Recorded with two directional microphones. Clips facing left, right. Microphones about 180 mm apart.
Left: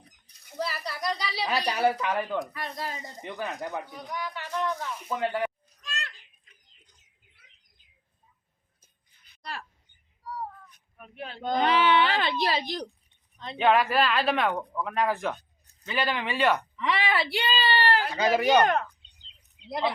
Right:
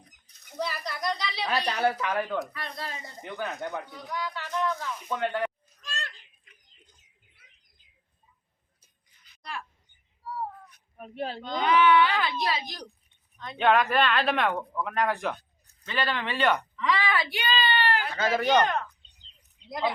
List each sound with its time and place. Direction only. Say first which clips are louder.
0.5 s speech: even; 5° left (ahead or behind)
2.6 s speech: left 2 dB; 15° left (ahead or behind)
3.2 s speech: even; centre (ahead or behind)
3.6 s a sound: even; 15° left (ahead or behind)
5.0 s speech: even; 5° left (ahead or behind)
9.4 s a sound: even; 35° left (ahead or behind)
10.2 s a sound: right 2 dB; 25° right (ahead or behind)
10.9 s speech: right 7 dB; 35° right (ahead or behind)
11.6 s speech: right 2 dB; 30° left (ahead or behind)
13.6 s speech: even; 5° left (ahead or behind)
15.9 s speech: left 1 dB; 10° left (ahead or behind)
16.7 s speech: even; 25° left (ahead or behind)
18.2 s speech: left 2 dB; 10° left (ahead or behind)